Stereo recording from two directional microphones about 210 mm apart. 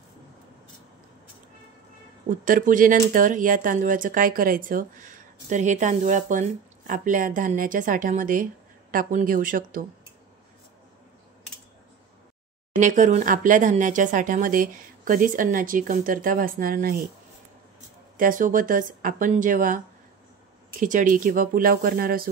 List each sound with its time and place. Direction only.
2.2 s speech: 40° right (ahead or behind)
12.7 s speech: 35° right (ahead or behind)
18.1 s speech: 40° right (ahead or behind)
20.8 s speech: 40° right (ahead or behind)